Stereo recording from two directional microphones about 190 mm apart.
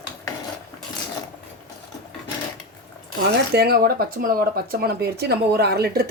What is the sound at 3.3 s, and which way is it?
Speech, 55° right (ahead or behind).